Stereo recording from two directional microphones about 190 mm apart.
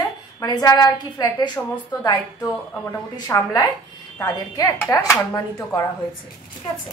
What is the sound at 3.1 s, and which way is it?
A woman's voice, 20° left (ahead or behind).